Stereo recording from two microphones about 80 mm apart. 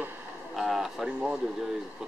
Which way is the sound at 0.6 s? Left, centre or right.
Centre.